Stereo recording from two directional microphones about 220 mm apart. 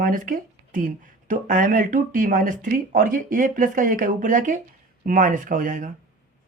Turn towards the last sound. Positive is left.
turn(degrees=-35)  # may be behind; listen again after turning